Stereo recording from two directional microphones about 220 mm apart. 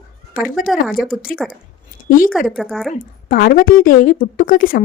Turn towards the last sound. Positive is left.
turn(degrees=40)  # may be behind; listen again after turning